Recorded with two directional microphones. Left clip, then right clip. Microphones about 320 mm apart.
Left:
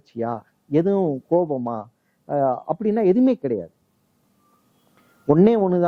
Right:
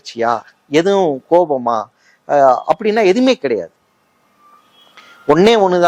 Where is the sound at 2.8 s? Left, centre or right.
Centre.